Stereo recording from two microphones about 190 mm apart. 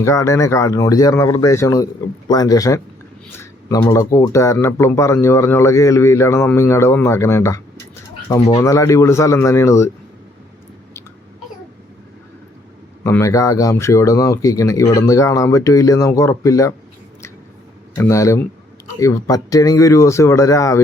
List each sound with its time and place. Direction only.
0.0 s speech: 15° left (ahead or behind)
13.1 s speech: 15° left (ahead or behind)
17.9 s speech: 15° left (ahead or behind)